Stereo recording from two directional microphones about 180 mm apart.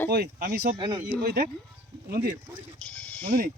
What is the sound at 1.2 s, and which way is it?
Speech, 55° right (ahead or behind).